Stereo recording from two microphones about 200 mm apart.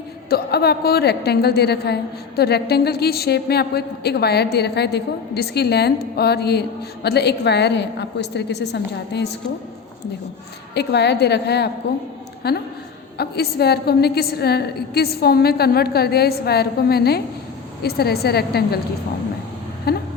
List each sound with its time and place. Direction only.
0.3 s a woman's voice: 50° left (ahead or behind)
10.8 s a woman's voice: 55° left (ahead or behind)
19.9 s a woman's voice: 50° left (ahead or behind)